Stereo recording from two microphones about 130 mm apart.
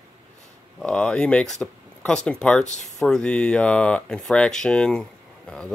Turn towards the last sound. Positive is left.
turn(degrees=5)  # may be behind; listen again after turning